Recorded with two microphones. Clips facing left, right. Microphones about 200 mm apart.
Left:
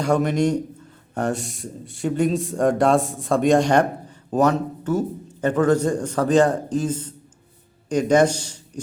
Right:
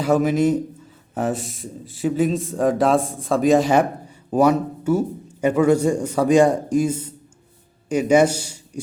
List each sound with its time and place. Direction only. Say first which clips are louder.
0.0 s a man's voice: right 2 dB; 5° right (ahead or behind)